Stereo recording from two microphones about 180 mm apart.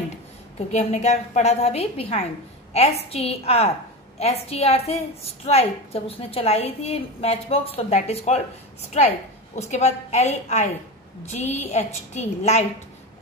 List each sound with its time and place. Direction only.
0.6 s a woman's voice: 40° left (ahead or behind)